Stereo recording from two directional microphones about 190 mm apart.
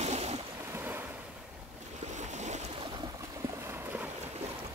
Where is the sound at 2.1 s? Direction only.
40° right (ahead or behind).